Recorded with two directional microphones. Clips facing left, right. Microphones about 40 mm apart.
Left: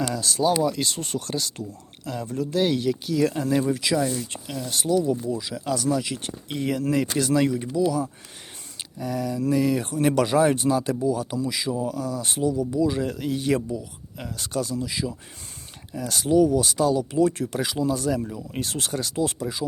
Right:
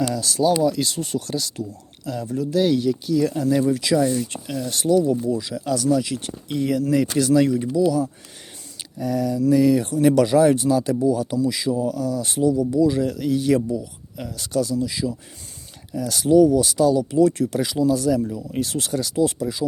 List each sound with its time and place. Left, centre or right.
0.0 s speech: left
2.8 s speech: left
3.3 s speech: left
11.1 s speech: centre